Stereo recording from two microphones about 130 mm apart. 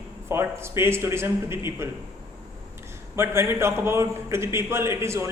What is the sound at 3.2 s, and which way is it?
A man's voice, 20° right (ahead or behind).